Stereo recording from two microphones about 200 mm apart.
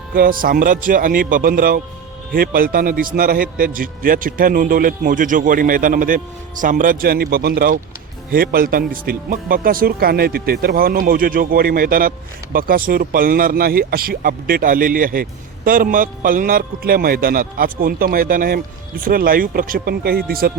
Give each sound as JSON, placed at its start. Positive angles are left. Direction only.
{"t": 0.1, "sound": "speech", "side_deg": -45}